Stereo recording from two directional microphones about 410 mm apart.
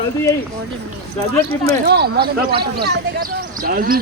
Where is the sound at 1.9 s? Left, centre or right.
Right.